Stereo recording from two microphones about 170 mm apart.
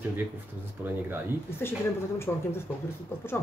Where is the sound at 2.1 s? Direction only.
15° left (ahead or behind).